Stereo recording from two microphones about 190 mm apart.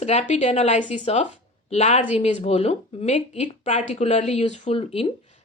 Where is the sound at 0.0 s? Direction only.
35° left (ahead or behind).